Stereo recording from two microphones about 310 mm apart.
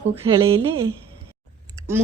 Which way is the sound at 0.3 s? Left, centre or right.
Centre.